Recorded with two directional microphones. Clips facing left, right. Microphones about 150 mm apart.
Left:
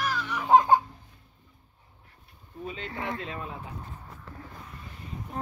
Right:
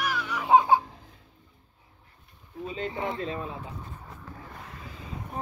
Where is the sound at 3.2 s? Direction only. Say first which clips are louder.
Right 4 dB; 30° right (ahead or behind).